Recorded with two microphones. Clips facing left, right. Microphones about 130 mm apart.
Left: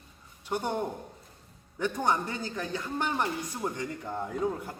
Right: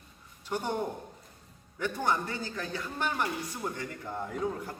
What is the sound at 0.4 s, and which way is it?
A man's voice, 15° left (ahead or behind).